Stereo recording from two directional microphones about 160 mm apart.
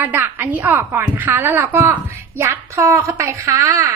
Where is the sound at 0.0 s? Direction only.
10° right (ahead or behind).